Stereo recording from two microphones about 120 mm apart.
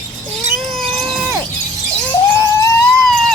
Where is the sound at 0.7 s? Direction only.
Centre (ahead or behind).